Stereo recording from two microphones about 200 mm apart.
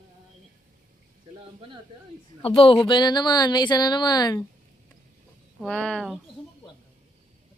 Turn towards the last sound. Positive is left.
turn(degrees=0)  # may be behind; listen again after turning